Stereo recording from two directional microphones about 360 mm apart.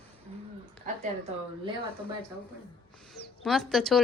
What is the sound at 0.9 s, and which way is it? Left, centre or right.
Speech, right.